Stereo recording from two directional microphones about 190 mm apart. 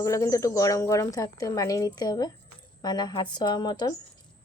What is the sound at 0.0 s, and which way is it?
A woman's voice, 15° left (ahead or behind).